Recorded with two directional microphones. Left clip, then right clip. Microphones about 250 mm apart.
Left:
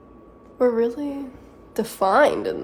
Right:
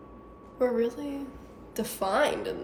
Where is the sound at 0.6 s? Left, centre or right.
Centre.